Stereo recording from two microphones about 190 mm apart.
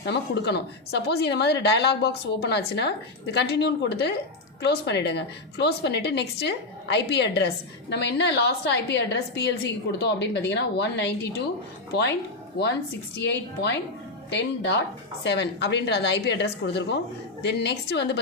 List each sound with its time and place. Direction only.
0.0 s a woman's voice: 60° left (ahead or behind)
13.1 s a woman's voice: 60° left (ahead or behind)